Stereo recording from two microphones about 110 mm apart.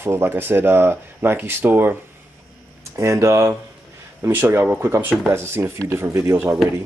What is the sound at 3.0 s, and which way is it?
Speech, 25° right (ahead or behind).